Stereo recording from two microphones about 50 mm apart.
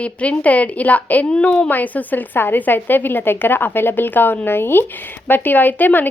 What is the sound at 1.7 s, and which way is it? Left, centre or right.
A woman's voice, left.